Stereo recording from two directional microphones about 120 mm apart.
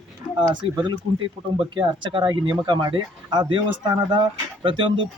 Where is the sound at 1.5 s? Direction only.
45° right (ahead or behind).